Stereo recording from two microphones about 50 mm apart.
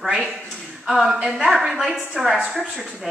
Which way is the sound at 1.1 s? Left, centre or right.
Centre.